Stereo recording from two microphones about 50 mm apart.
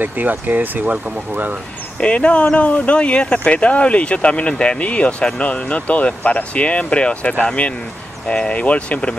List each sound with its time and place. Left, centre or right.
0.0 s speech: right
2.0 s speech: left